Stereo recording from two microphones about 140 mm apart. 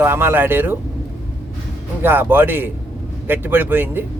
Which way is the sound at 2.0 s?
15° right (ahead or behind).